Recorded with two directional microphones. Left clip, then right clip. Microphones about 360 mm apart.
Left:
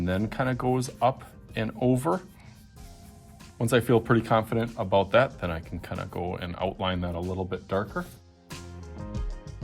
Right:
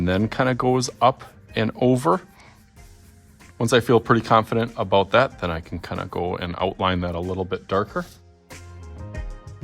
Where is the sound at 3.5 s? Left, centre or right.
Centre.